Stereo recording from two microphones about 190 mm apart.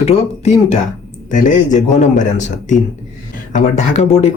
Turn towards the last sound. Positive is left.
turn(degrees=35)  # may be behind; listen again after turning